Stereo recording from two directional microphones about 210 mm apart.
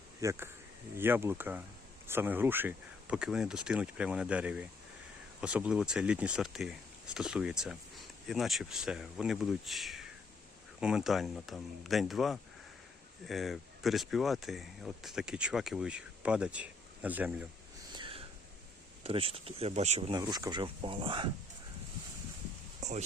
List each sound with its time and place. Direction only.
0.2 s speech: 15° right (ahead or behind)
17.9 s a sound: 25° right (ahead or behind)
19.0 s speech: 25° right (ahead or behind)
22.8 s speech: 35° right (ahead or behind)